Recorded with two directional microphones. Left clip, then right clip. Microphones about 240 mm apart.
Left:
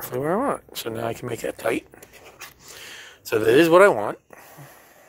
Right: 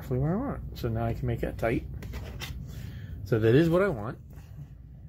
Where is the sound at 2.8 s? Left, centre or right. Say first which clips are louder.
Left 4 dB; left.